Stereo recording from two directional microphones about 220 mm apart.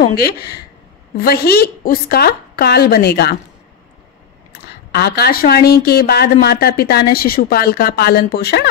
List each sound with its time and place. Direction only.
0.0 s a woman's voice: 45° left (ahead or behind)
4.5 s a woman's voice: 45° left (ahead or behind)